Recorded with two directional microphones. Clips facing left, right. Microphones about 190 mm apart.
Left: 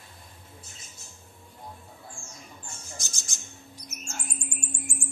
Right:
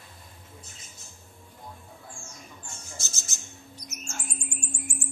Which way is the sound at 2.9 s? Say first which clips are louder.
Even; 15° left (ahead or behind).